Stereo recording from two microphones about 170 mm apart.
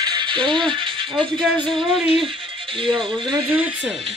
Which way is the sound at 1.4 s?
5° left (ahead or behind).